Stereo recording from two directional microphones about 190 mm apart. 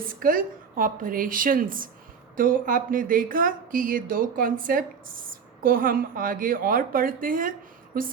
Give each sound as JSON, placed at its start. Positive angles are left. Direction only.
{"t": 0.1, "sound": "a woman's voice", "side_deg": -45}